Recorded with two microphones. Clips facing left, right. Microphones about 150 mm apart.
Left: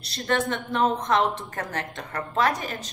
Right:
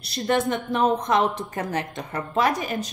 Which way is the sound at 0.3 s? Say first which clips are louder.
Right 3 dB; 15° right (ahead or behind).